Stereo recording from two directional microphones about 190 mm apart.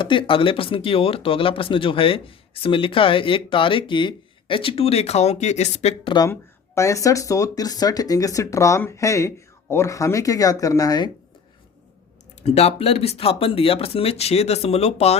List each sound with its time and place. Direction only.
0.0 s speech: 25° left (ahead or behind)
6.1 s speech: 15° left (ahead or behind)
12.4 s speech: 35° left (ahead or behind)